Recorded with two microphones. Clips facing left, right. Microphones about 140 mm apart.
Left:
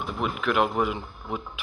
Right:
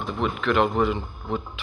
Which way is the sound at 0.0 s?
5° left (ahead or behind).